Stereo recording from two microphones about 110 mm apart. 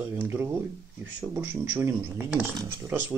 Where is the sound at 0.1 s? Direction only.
25° right (ahead or behind).